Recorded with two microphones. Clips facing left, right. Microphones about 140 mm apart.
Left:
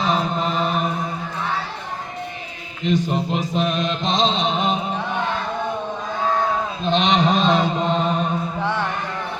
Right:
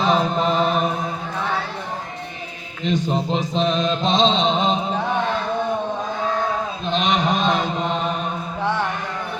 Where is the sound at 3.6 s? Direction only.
30° right (ahead or behind).